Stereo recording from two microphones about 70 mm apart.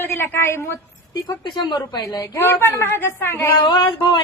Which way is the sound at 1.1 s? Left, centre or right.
Left.